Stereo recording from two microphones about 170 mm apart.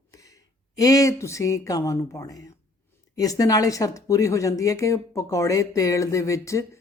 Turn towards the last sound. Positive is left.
turn(degrees=20)  # may be behind; listen again after turning